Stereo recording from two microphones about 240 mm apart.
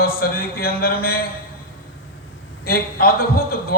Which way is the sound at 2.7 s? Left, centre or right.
Left.